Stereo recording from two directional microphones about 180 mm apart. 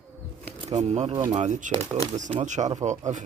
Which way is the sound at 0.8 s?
40° right (ahead or behind).